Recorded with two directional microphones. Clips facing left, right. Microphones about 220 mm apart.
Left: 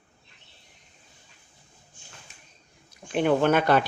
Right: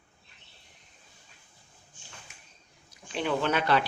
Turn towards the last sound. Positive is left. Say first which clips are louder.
# left 5 dB
turn(degrees=50)  # may be behind; listen again after turning